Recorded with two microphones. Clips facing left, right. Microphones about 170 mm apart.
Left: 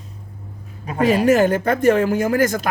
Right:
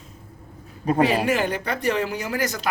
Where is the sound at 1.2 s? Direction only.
45° left (ahead or behind).